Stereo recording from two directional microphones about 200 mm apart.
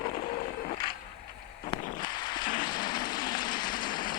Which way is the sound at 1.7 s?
20° left (ahead or behind).